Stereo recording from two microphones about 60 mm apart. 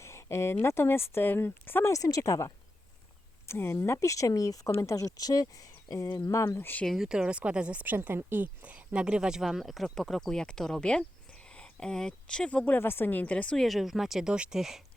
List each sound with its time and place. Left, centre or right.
0.0 s a sound: left
0.5 s speech: left
1.9 s speech: left
3.4 s speech: left
6.8 s speech: centre
7.1 s speech: centre
7.9 s a woman's voice: right
8.6 s speech: right; by 9.8 s centre
9.8 s speech: centre
11.4 s a sound: centre
12.6 s speech: left
13.1 s a woman's voice: left
13.6 s speech: centre